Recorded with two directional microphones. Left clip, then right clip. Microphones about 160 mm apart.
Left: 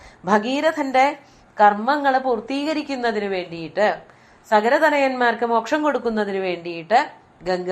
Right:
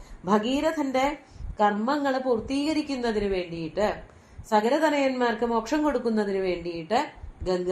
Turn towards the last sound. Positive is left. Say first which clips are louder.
# left 5 dB
turn(degrees=30)  # may be behind; listen again after turning